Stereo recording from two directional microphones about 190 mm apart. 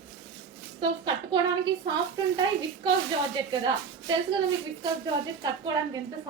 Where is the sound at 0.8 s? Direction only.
25° right (ahead or behind).